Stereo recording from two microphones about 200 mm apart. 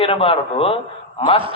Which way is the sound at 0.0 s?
25° left (ahead or behind).